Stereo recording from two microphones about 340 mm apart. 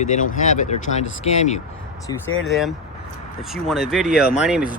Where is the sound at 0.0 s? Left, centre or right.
Left.